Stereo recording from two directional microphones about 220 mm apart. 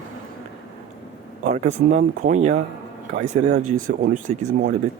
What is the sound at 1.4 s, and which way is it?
Speech, 30° right (ahead or behind).